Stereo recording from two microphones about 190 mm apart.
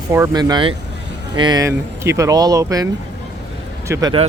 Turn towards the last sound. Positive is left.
turn(degrees=-20)  # may be behind; listen again after turning